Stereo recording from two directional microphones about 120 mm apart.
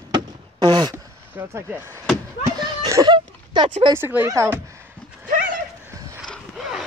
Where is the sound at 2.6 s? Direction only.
35° right (ahead or behind).